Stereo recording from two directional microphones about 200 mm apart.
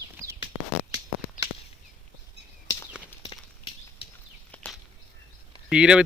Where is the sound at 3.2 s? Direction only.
25° left (ahead or behind).